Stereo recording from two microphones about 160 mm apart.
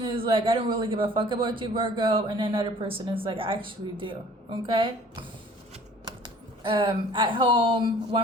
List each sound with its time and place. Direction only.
0.0 s a man's voice: 35° right (ahead or behind)